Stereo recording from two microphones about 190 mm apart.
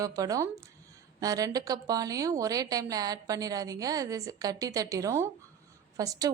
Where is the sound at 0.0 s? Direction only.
20° right (ahead or behind).